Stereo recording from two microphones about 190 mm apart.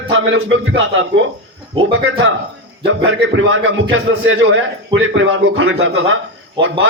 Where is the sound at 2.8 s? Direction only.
75° right (ahead or behind).